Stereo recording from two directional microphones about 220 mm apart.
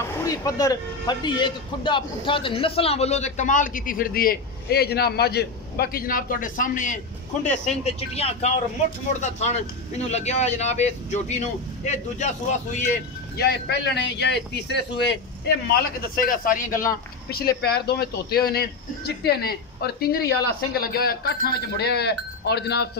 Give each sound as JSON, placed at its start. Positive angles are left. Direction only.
{"t": 0.0, "sound": "speech", "side_deg": 15}